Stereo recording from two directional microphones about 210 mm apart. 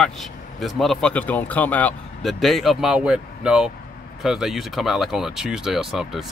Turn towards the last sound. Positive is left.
turn(degrees=0)  # may be behind; listen again after turning